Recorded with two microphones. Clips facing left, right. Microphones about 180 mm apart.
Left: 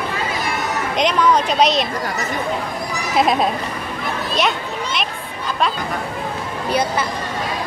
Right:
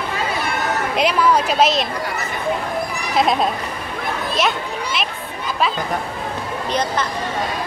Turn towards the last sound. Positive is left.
turn(degrees=10)  # may be behind; listen again after turning